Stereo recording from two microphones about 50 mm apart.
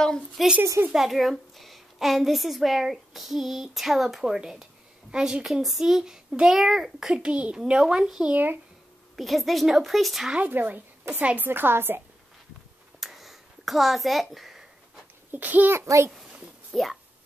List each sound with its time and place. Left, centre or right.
0.4 s a woman's voice: centre
7.1 s a child's voice: right
8.3 s a woman's voice: right
9.1 s a woman's voice: centre
10.5 s a woman's voice: right
13.0 s a sound: centre
15.3 s a woman's voice: right
15.7 s a child's voice: right
16.7 s speech: centre